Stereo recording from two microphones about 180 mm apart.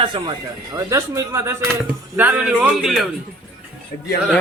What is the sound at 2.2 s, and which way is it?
Speech, 10° right (ahead or behind).